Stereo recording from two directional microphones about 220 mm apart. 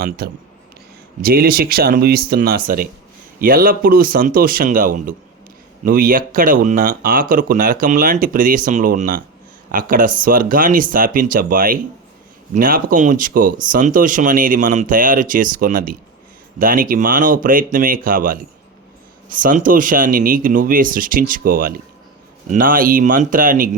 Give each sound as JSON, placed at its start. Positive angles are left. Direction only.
{"t": 0.2, "sound": "speech", "side_deg": -45}